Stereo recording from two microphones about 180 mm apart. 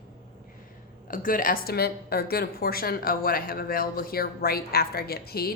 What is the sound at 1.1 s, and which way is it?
A woman's voice, 50° left (ahead or behind).